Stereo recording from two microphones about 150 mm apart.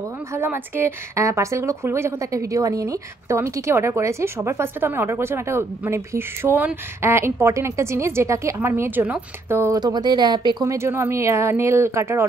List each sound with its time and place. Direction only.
0.3 s a woman's voice: 15° right (ahead or behind)
9.8 s a woman's voice: 30° right (ahead or behind)